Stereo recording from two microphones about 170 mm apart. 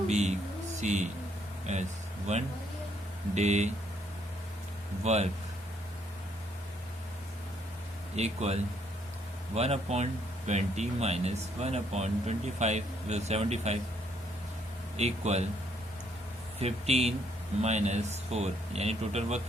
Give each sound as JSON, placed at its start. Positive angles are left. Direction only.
{"t": 0.1, "sound": "speech", "side_deg": -40}
{"t": 5.0, "sound": "speech", "side_deg": -40}
{"t": 8.1, "sound": "speech", "side_deg": -40}
{"t": 9.6, "sound": "speech", "side_deg": -40}
{"t": 14.9, "sound": "speech", "side_deg": -40}
{"t": 16.6, "sound": "speech", "side_deg": -35}